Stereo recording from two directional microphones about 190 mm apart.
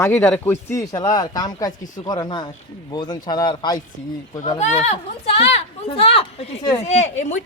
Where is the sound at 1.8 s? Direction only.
40° left (ahead or behind).